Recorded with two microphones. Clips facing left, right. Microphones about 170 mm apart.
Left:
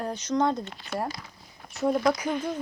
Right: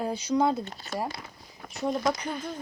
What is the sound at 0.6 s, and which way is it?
Speech, 40° right (ahead or behind).